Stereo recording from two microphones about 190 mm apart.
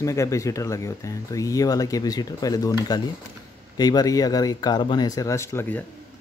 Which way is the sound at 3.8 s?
20° left (ahead or behind).